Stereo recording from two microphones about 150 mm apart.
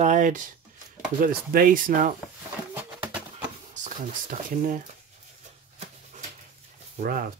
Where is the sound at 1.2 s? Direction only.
70° right (ahead or behind).